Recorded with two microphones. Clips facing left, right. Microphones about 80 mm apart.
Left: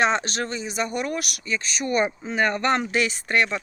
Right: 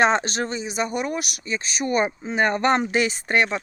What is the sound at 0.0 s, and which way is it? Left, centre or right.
Speech, right.